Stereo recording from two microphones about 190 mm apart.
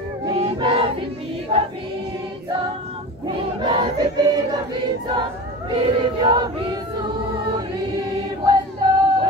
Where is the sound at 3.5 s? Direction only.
25° right (ahead or behind).